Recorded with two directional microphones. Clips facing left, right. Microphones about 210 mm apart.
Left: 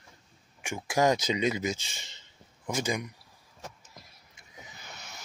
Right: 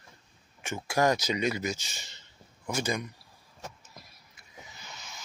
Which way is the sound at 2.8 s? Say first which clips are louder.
Even; 15° left (ahead or behind).